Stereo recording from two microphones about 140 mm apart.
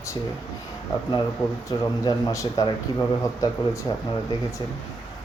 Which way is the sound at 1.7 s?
25° left (ahead or behind).